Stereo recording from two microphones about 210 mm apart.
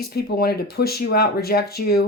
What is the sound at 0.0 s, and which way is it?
Speech, 50° left (ahead or behind).